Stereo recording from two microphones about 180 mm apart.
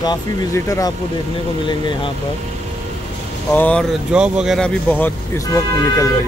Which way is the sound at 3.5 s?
10° left (ahead or behind).